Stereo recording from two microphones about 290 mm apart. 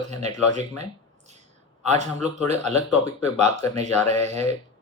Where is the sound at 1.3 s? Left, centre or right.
Right.